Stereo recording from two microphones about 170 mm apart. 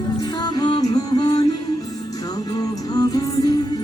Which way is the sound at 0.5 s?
25° left (ahead or behind).